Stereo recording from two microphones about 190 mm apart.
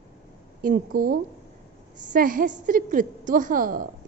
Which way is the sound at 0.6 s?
45° right (ahead or behind).